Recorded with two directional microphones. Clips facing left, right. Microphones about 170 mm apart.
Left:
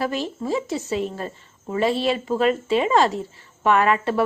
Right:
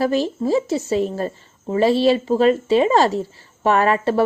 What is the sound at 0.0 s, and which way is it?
Speech, 35° right (ahead or behind).